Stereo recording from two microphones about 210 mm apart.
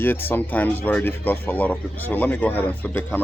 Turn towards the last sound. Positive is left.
turn(degrees=10)  # may be behind; listen again after turning